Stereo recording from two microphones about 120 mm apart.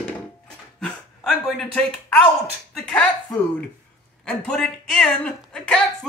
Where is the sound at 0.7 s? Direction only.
5° left (ahead or behind).